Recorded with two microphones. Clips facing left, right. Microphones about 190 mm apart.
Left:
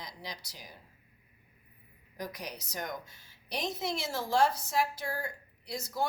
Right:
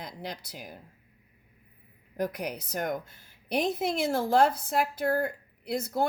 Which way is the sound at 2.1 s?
55° right (ahead or behind).